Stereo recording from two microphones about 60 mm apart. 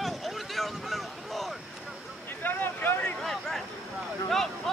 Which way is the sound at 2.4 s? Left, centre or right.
Left.